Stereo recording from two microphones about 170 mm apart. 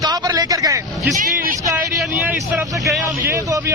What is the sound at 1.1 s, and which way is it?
Speech, 50° right (ahead or behind).